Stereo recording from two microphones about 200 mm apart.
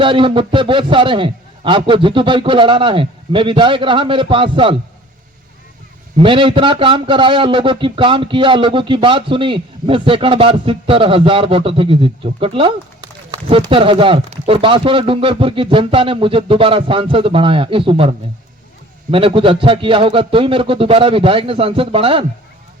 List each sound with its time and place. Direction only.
0.0 s a man's voice: 25° right (ahead or behind)
6.1 s a man's voice: 25° right (ahead or behind)
19.1 s a man's voice: 25° right (ahead or behind)